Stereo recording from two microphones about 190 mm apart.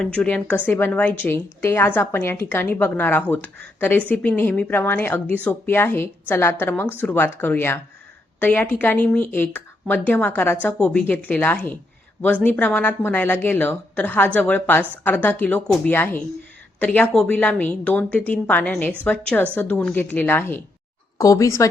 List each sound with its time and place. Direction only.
0.0 s a woman's voice: 5° left (ahead or behind)